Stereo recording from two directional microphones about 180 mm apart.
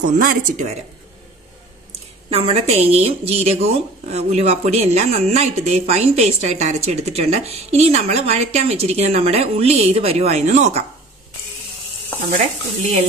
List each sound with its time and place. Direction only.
0.0 s speech: 50° right (ahead or behind)
1.9 s a woman's voice: 30° right (ahead or behind)